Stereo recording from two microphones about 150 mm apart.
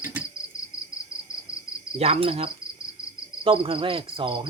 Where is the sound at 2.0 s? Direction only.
40° right (ahead or behind).